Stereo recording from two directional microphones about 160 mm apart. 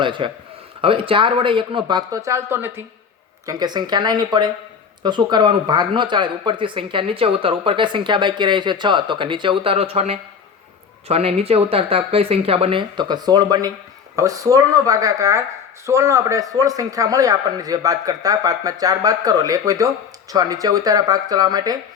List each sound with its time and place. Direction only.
0.0 s speech: 30° right (ahead or behind); by 2.8 s 15° right (ahead or behind)
3.4 s speech: 25° right (ahead or behind)